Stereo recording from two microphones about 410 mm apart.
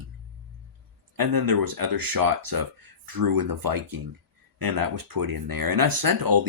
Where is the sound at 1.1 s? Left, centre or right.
Right.